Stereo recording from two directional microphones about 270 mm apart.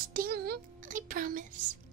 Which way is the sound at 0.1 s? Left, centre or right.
Right.